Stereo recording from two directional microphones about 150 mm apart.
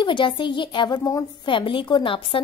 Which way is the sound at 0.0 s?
30° left (ahead or behind).